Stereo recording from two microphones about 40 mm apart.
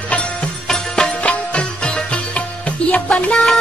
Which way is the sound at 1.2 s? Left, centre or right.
Left.